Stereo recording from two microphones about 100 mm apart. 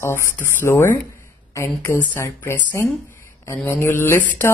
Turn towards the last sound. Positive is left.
turn(degrees=25)  # may be behind; listen again after turning